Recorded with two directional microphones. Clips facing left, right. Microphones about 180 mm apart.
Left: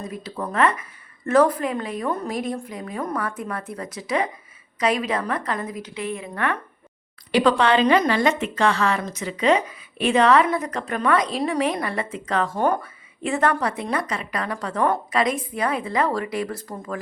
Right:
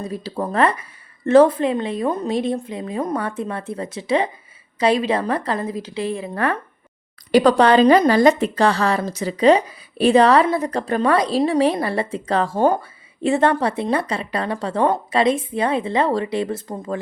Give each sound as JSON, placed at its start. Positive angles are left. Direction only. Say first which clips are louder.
{"t": 0.0, "sound": "a woman's voice", "louder": "right 5 dB", "side_deg": -30}